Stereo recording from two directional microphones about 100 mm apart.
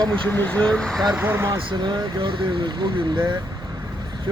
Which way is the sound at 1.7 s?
50° right (ahead or behind).